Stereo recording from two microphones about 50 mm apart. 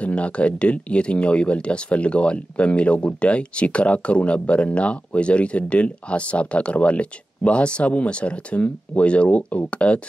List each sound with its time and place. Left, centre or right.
0.0 s speech: left